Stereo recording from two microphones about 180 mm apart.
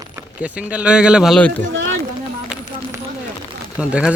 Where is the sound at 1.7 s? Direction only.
90° right.